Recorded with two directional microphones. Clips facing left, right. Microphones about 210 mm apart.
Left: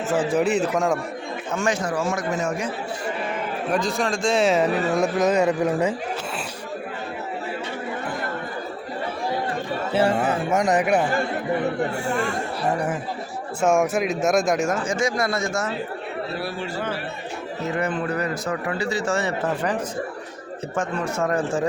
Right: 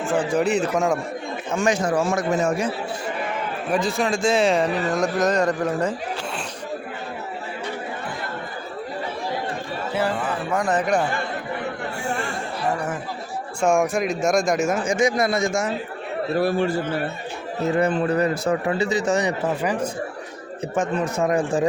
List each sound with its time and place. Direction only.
0.3 s a man's voice: centre (ahead or behind)
1.5 s a man's voice: 15° right (ahead or behind)
2.0 s a man's voice: 30° right (ahead or behind)
3.7 s a man's voice: 5° right (ahead or behind)
9.9 s speech: 30° left (ahead or behind)
10.2 s speech: 40° left (ahead or behind)
10.5 s speech: 20° left (ahead or behind)
13.6 s a man's voice: 5° left (ahead or behind)
14.8 s a man's voice: 15° right (ahead or behind)
16.4 s a man's voice: 50° right (ahead or behind)
17.7 s a man's voice: 30° right (ahead or behind)